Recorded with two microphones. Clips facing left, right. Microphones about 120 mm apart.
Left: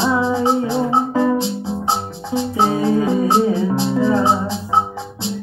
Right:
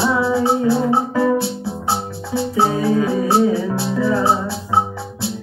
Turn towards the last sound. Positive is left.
turn(degrees=20)  # may be behind; listen again after turning